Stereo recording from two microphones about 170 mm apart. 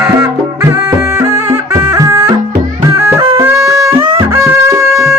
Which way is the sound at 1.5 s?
15° right (ahead or behind).